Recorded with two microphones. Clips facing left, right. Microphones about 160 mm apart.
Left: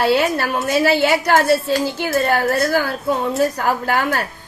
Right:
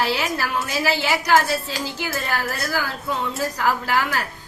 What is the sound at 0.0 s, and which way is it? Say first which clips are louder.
A woman's voice: left 7 dB; 55° left (ahead or behind).